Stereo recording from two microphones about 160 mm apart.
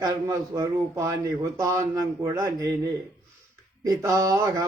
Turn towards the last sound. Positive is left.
turn(degrees=-20)  # may be behind; listen again after turning